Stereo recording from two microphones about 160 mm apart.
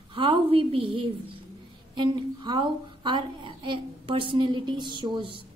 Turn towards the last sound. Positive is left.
turn(degrees=-30)  # may be behind; listen again after turning